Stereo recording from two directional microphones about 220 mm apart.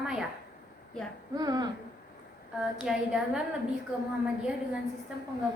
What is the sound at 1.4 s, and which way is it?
Speech, 20° right (ahead or behind).